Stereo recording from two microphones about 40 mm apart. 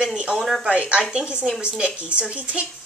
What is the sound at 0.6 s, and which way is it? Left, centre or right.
Speech, right.